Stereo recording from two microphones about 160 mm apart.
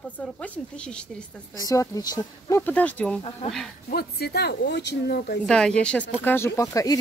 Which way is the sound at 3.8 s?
75° left (ahead or behind).